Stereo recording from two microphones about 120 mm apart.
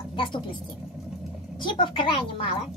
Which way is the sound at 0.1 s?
45° left (ahead or behind).